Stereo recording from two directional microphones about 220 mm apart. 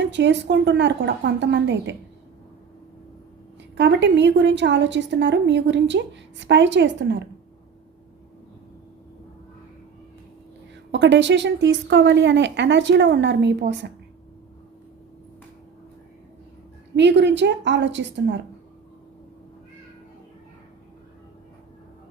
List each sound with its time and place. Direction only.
0.0 s a woman's voice: 55° right (ahead or behind)
3.8 s a woman's voice: 55° right (ahead or behind)
10.9 s a woman's voice: 55° right (ahead or behind)
16.9 s a woman's voice: 50° right (ahead or behind)